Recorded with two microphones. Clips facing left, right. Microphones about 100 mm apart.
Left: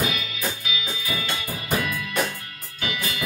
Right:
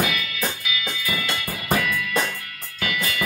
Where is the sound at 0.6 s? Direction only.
30° left (ahead or behind).